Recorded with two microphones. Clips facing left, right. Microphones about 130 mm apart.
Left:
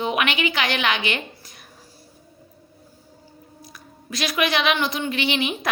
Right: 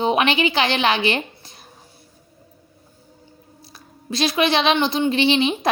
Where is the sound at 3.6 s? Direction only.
30° right (ahead or behind).